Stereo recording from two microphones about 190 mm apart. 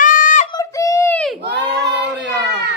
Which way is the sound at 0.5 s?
15° left (ahead or behind).